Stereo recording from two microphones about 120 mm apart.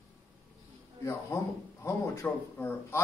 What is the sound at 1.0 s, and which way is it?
Speech, 20° left (ahead or behind).